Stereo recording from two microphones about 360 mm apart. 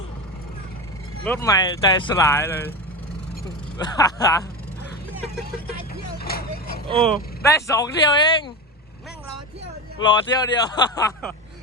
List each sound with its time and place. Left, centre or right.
1.2 s speech: centre
3.8 s speech: centre
5.4 s vehicle: left
7.0 s speech: centre
10.0 s speech: centre